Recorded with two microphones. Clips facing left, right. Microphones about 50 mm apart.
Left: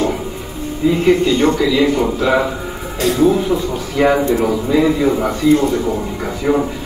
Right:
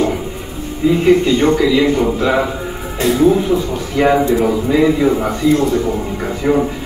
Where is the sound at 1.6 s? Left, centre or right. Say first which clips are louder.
Right 1 dB; centre.